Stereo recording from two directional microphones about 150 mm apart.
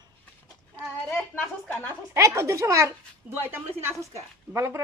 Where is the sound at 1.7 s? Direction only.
10° left (ahead or behind).